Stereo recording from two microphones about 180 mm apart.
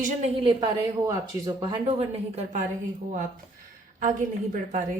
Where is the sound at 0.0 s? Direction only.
35° right (ahead or behind).